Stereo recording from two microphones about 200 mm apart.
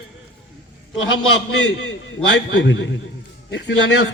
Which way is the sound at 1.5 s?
65° left (ahead or behind).